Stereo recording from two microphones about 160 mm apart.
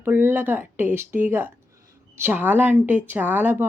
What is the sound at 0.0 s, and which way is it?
A woman's voice, 15° right (ahead or behind).